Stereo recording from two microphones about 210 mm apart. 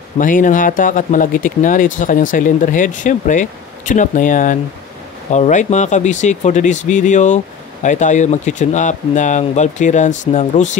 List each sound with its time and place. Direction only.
0.2 s speech: 40° left (ahead or behind)